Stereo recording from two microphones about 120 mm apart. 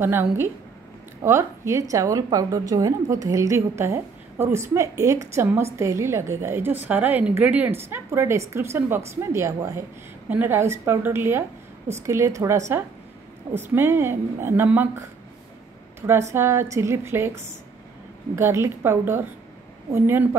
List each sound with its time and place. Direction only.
0.0 s a woman's voice: 20° right (ahead or behind)
16.1 s a woman's voice: 20° right (ahead or behind)
18.3 s a woman's voice: 25° right (ahead or behind)